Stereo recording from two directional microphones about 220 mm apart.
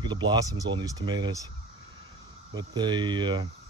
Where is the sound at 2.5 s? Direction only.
20° right (ahead or behind).